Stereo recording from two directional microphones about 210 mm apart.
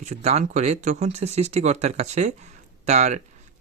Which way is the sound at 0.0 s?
30° right (ahead or behind).